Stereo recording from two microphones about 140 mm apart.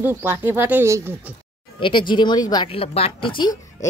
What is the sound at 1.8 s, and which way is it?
Speech, 35° left (ahead or behind).